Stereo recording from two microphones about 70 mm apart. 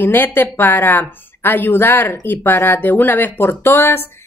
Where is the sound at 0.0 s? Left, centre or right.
Left.